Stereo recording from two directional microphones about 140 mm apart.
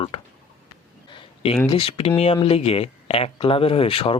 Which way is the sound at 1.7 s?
40° left (ahead or behind).